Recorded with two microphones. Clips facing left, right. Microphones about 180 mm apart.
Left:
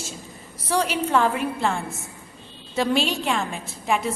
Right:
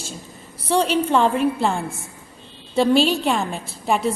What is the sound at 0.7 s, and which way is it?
A woman's voice, 30° right (ahead or behind).